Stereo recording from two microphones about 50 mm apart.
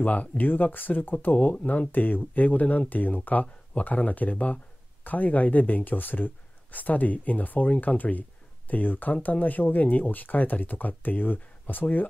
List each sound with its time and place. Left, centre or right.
0.0 s speech: left
1.9 s speech: left